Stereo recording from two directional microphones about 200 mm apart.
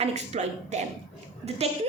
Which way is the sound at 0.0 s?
35° right (ahead or behind).